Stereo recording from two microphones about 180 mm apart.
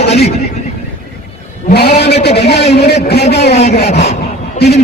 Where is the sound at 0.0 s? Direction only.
35° left (ahead or behind).